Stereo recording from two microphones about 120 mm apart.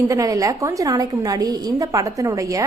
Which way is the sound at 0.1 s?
30° right (ahead or behind).